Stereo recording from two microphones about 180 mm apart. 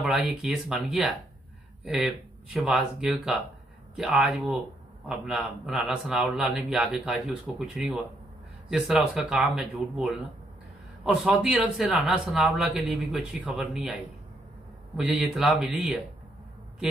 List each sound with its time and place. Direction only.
0.0 s a man's voice: 5° right (ahead or behind)